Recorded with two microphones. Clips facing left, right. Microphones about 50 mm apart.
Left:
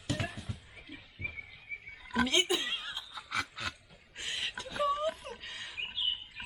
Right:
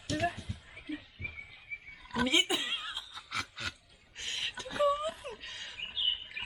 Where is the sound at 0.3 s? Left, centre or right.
Centre.